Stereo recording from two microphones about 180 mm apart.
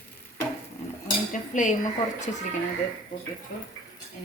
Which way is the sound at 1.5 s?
45° left (ahead or behind).